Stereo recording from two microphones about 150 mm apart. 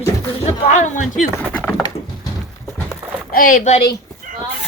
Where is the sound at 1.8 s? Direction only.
25° left (ahead or behind).